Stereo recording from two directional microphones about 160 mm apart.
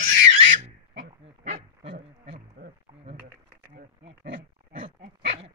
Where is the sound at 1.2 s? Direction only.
45° right (ahead or behind).